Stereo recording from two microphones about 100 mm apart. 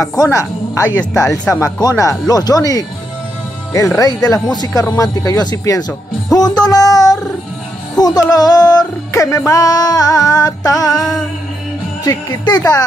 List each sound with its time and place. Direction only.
0.0 s speech: 40° left (ahead or behind)
6.3 s a sound: 40° left (ahead or behind)
8.0 s speech: 40° left (ahead or behind)
11.0 s music: 5° left (ahead or behind)
12.0 s speech: 40° left (ahead or behind)